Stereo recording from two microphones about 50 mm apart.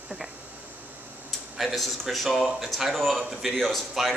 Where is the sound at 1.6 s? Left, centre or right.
Centre.